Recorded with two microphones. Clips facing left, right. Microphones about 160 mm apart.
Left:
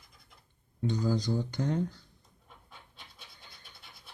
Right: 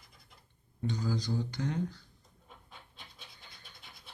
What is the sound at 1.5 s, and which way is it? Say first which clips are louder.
Speech: left 4 dB; 40° left (ahead or behind).